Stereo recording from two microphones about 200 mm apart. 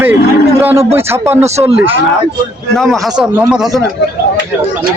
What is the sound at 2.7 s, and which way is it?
A man's voice, centre (ahead or behind).